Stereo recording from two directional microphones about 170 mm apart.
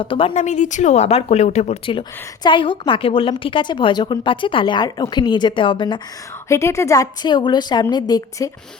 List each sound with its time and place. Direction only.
0.0 s a woman's voice: 30° left (ahead or behind)
6.5 s a woman's voice: 15° left (ahead or behind)